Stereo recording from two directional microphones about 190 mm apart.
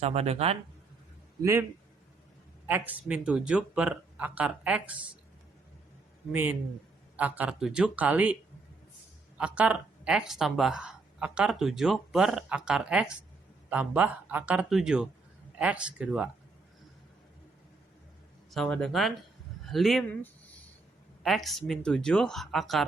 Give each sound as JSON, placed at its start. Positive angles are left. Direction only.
{"t": 0.0, "sound": "speech", "side_deg": -35}
{"t": 1.4, "sound": "a man's voice", "side_deg": -15}
{"t": 2.6, "sound": "speech", "side_deg": -10}
{"t": 6.3, "sound": "speech", "side_deg": -10}
{"t": 9.4, "sound": "speech", "side_deg": -5}
{"t": 18.5, "sound": "speech", "side_deg": 5}
{"t": 19.6, "sound": "a sound", "side_deg": 0}
{"t": 21.2, "sound": "speech", "side_deg": 0}